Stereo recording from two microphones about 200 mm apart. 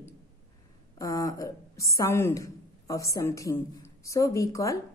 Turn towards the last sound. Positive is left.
turn(degrees=15)  # may be behind; listen again after turning